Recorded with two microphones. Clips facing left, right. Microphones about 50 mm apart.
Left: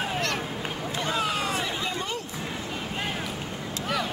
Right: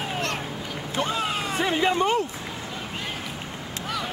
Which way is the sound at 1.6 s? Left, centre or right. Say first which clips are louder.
Right 8 dB; right.